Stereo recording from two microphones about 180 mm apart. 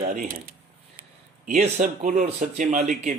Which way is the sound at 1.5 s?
40° right (ahead or behind).